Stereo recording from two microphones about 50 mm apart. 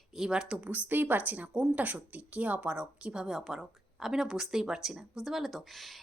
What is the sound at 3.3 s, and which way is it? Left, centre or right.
Speech, centre.